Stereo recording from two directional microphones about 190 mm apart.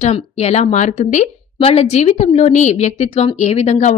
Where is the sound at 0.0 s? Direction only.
35° left (ahead or behind).